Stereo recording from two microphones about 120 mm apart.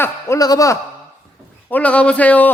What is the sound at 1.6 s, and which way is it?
Speech, 10° left (ahead or behind).